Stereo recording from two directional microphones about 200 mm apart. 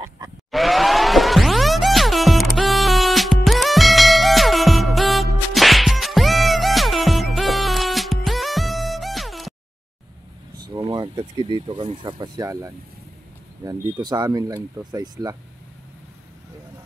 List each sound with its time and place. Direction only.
0.5 s music: centre (ahead or behind)
10.7 s speech: 20° right (ahead or behind)